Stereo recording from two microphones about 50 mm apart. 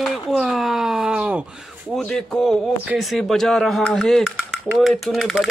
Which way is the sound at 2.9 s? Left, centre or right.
Centre.